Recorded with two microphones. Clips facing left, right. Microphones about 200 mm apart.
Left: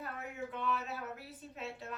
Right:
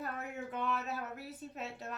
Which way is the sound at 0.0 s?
45° right (ahead or behind).